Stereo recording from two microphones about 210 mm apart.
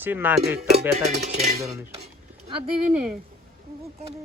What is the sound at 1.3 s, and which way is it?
Dishes, 30° right (ahead or behind).